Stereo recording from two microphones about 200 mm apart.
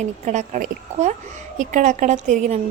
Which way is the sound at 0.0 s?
35° right (ahead or behind).